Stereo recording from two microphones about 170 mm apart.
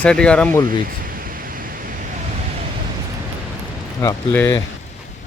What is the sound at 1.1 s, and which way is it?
Pink noise, 55° right (ahead or behind).